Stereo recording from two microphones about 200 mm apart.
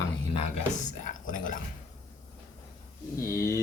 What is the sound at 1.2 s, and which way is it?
Speech, 40° left (ahead or behind).